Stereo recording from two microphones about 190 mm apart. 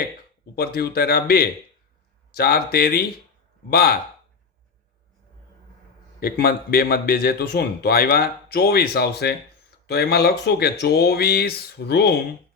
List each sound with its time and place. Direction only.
0.5 s speech: 55° left (ahead or behind)
6.1 s speech: 50° left (ahead or behind)